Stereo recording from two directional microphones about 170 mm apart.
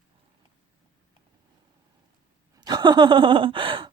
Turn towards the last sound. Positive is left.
turn(degrees=-30)  # may be behind; listen again after turning